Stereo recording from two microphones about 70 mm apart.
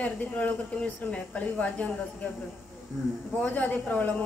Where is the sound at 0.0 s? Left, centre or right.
Left.